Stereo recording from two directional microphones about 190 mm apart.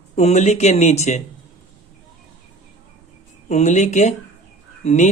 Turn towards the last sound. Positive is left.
turn(degrees=40)  # may be behind; listen again after turning